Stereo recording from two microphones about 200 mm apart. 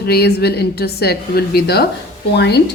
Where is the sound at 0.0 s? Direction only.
55° left (ahead or behind).